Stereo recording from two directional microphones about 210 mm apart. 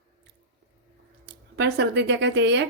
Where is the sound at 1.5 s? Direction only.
50° right (ahead or behind).